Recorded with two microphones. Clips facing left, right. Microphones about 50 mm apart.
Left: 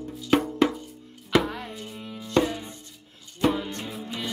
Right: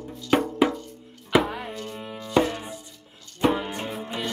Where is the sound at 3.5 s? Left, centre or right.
Right.